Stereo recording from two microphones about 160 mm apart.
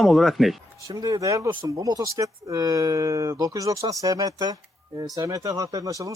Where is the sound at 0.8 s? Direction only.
25° right (ahead or behind).